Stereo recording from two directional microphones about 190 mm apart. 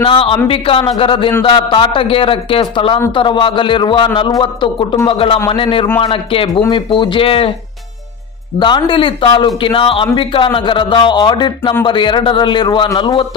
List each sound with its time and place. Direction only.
0.0 s a man's voice: 30° left (ahead or behind)
8.5 s a man's voice: 25° left (ahead or behind)